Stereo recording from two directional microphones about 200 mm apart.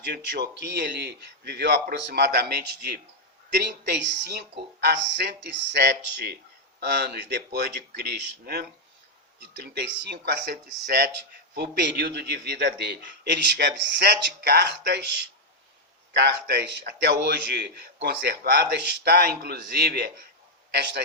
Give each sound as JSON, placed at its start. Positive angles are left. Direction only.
{"t": 0.0, "sound": "a man's voice", "side_deg": -55}
{"t": 16.1, "sound": "a man's voice", "side_deg": -55}